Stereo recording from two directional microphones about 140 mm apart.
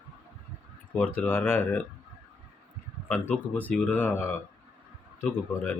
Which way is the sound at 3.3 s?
10° left (ahead or behind).